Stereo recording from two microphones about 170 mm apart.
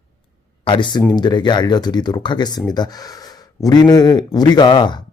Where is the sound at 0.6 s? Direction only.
30° left (ahead or behind).